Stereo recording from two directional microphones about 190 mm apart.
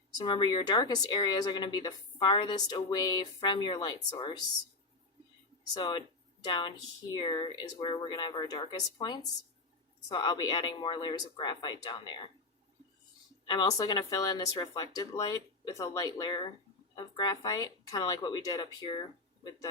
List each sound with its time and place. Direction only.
0.2 s a woman's voice: 25° left (ahead or behind)
5.7 s a woman's voice: 25° left (ahead or behind)
13.5 s a woman's voice: 20° left (ahead or behind)